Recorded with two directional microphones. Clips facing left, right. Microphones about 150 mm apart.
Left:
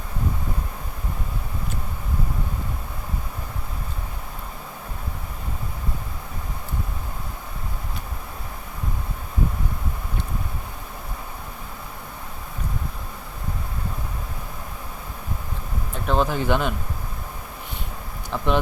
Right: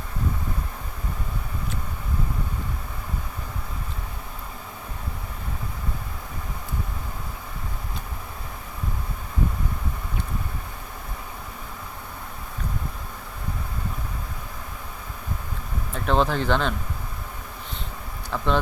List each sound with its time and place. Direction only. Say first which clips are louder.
16.0 s speech: even; 5° left (ahead or behind)
18.3 s vehicle: left 1 dB; 15° left (ahead or behind)